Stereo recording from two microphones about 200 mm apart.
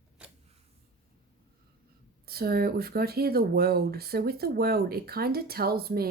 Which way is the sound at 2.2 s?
50° right (ahead or behind).